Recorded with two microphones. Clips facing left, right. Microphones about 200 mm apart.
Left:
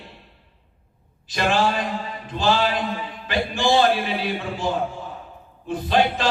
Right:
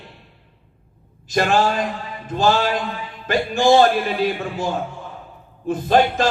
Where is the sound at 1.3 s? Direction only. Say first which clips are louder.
Right 3 dB; 45° right (ahead or behind).